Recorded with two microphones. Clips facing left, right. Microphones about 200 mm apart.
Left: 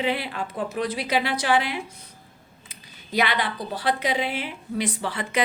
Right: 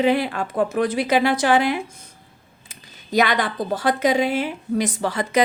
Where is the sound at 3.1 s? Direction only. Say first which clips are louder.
Right 5 dB; 45° right (ahead or behind).